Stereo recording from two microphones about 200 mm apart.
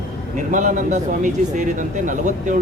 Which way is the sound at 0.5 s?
40° right (ahead or behind).